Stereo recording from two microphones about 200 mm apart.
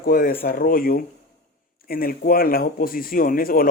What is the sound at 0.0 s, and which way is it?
Speech, 45° left (ahead or behind).